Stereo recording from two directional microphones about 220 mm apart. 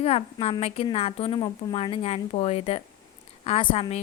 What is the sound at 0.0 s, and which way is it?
A woman's voice, 25° left (ahead or behind).